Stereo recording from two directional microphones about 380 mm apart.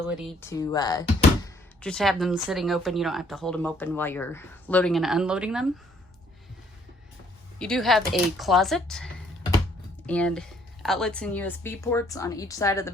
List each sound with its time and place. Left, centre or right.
0.1 s speech: centre
7.6 s speech: centre
10.1 s speech: centre